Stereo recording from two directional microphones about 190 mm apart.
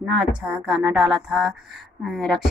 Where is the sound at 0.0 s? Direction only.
Centre (ahead or behind).